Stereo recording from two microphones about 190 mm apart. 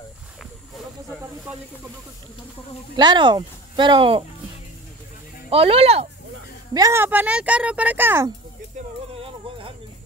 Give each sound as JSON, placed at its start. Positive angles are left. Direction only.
{"t": 3.0, "sound": "speech", "side_deg": -25}
{"t": 5.5, "sound": "speech", "side_deg": -30}
{"t": 6.7, "sound": "speech", "side_deg": -15}
{"t": 9.1, "sound": "a sound", "side_deg": -30}